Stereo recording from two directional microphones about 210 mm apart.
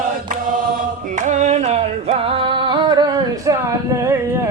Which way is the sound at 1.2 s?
35° right (ahead or behind).